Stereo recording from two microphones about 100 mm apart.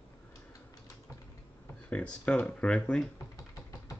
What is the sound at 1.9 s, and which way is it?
Speech, 10° left (ahead or behind).